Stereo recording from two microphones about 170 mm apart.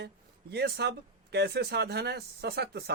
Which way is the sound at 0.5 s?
75° right (ahead or behind).